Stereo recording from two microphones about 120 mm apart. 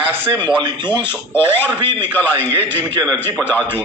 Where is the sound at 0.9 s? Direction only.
15° left (ahead or behind).